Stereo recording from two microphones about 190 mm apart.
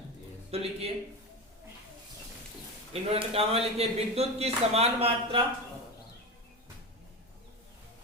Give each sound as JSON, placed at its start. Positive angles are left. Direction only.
{"t": 0.5, "sound": "a man's voice", "side_deg": -30}
{"t": 2.9, "sound": "a man's voice", "side_deg": -30}